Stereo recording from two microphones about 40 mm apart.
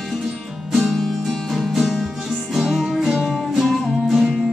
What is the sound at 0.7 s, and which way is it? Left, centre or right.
Music, centre.